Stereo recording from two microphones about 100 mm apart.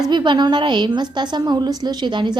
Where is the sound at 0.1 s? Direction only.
50° right (ahead or behind).